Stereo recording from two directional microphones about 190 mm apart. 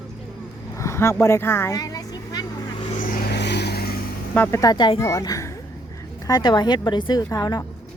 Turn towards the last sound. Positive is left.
turn(degrees=20)  # may be behind; listen again after turning